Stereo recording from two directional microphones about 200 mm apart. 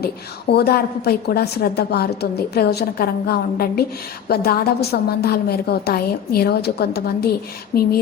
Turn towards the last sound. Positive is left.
turn(degrees=50)  # may be behind; listen again after turning